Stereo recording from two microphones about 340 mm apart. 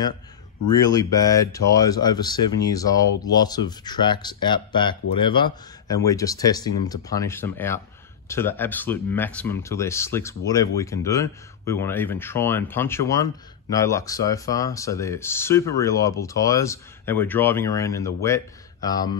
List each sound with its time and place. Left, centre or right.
0.7 s speech: centre